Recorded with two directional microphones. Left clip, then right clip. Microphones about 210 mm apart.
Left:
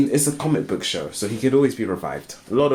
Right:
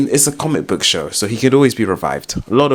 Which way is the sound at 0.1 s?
45° right (ahead or behind).